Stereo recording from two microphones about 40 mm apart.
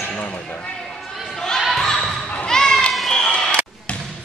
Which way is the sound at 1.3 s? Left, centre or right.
Centre.